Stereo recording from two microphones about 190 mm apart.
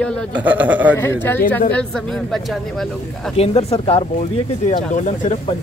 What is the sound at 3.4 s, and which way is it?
Speech, 30° left (ahead or behind).